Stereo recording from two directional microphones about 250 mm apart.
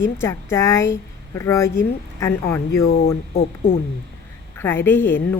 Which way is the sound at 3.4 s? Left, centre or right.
Left.